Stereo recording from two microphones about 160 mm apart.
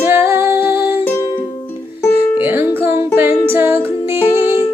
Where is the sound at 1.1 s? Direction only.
15° left (ahead or behind).